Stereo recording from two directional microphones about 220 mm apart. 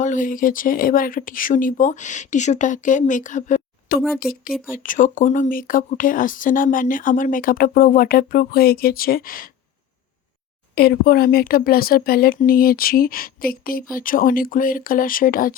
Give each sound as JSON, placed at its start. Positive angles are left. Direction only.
{"t": 0.0, "sound": "speech", "side_deg": 35}
{"t": 10.8, "sound": "speech", "side_deg": 45}